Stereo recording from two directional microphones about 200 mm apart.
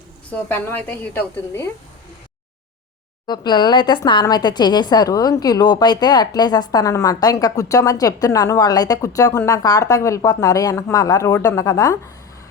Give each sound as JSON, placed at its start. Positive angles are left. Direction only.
{"t": 0.3, "sound": "a woman's voice", "side_deg": 10}
{"t": 3.2, "sound": "a woman's voice", "side_deg": 20}